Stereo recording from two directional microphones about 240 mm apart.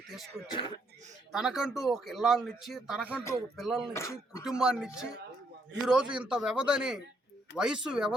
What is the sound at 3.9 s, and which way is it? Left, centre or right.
Speech, centre.